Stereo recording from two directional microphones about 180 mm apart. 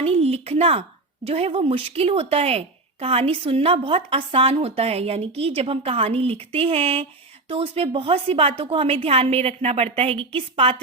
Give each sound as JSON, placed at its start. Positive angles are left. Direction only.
{"t": 0.0, "sound": "speech", "side_deg": -35}